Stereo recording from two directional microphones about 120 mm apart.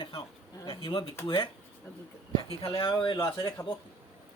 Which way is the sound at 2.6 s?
50° left (ahead or behind).